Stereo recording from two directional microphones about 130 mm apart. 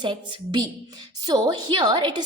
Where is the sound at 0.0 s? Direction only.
35° right (ahead or behind).